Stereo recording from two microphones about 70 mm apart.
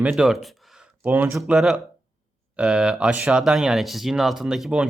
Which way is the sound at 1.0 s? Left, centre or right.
Right.